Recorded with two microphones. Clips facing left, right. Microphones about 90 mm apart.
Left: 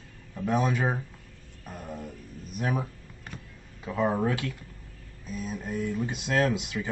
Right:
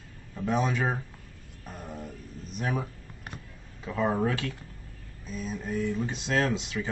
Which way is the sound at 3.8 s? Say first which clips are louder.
Left 1 dB; 5° left (ahead or behind).